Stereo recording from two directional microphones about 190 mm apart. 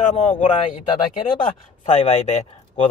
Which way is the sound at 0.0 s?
35° left (ahead or behind).